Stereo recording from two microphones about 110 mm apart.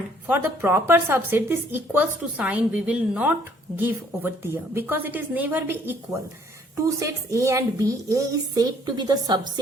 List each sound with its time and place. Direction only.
0.3 s a woman's voice: 20° right (ahead or behind); by 9.4 s 40° right (ahead or behind)